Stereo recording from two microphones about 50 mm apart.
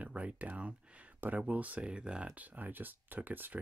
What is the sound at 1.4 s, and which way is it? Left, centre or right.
Speech, right.